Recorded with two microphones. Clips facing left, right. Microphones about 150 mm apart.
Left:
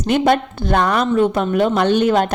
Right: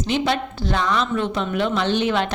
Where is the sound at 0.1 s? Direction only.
50° left (ahead or behind).